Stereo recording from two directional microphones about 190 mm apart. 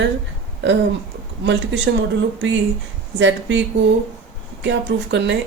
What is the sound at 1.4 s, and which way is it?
Speech, 70° right (ahead or behind).